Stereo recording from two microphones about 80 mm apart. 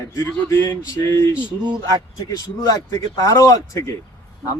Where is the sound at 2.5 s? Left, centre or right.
Left.